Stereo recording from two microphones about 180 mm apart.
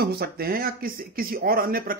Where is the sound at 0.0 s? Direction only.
60° right (ahead or behind).